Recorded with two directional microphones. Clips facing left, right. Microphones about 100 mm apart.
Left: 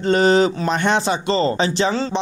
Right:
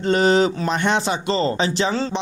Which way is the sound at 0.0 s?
35° left (ahead or behind).